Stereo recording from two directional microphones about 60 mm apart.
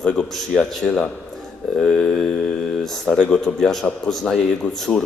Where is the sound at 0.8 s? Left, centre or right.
Centre.